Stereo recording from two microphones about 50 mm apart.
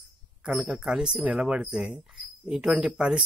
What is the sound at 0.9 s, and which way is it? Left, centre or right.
Speech, centre.